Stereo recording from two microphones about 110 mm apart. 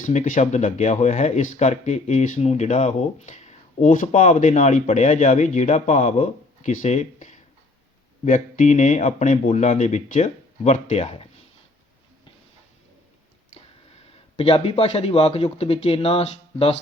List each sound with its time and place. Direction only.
0.1 s speech: 90° left; by 11.3 s 65° left (ahead or behind)
14.3 s speech: 55° left (ahead or behind)